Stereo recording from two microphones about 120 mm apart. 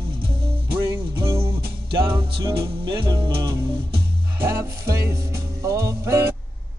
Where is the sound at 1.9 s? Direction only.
45° right (ahead or behind).